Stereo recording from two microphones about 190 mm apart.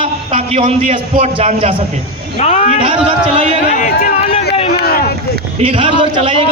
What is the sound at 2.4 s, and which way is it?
Speech, 35° left (ahead or behind).